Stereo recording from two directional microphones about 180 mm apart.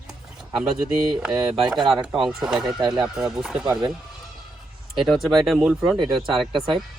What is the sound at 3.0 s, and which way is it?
Speech, 5° right (ahead or behind).